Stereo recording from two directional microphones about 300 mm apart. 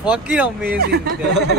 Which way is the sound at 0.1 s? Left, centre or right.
Centre.